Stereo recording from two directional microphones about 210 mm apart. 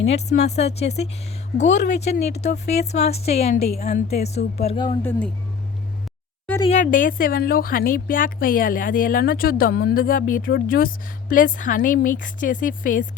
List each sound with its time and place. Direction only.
0.0 s a woman's voice: 30° left (ahead or behind)
6.6 s speech: 30° left (ahead or behind)
6.8 s a woman's voice: 40° left (ahead or behind)